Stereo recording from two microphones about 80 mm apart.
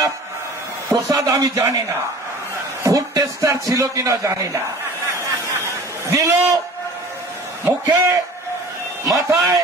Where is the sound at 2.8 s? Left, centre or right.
Right.